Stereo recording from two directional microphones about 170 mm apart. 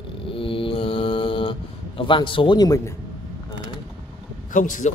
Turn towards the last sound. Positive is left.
turn(degrees=50)  # may be behind; listen again after turning